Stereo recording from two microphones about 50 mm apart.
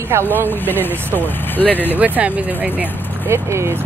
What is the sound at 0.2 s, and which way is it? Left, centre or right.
Speech, left.